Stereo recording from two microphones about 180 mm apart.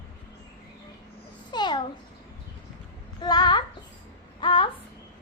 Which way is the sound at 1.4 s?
25° left (ahead or behind).